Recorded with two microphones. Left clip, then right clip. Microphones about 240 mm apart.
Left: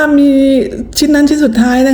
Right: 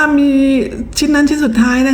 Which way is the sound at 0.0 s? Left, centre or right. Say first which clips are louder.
Left 3 dB; centre.